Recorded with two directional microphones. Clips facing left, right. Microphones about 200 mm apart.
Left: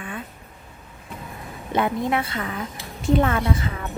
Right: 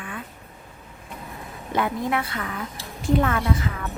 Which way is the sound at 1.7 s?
25° left (ahead or behind).